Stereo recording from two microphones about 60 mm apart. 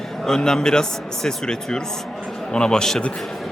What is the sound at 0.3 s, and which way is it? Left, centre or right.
A man's voice, centre.